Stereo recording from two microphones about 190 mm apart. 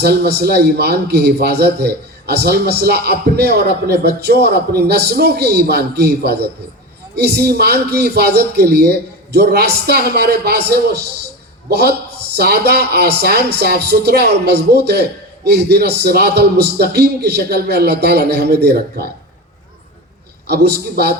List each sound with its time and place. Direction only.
0.0 s a man's voice: 60° right (ahead or behind)
20.5 s a man's voice: 60° right (ahead or behind)